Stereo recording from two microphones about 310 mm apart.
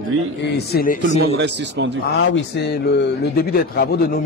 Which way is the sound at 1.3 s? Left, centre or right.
Right.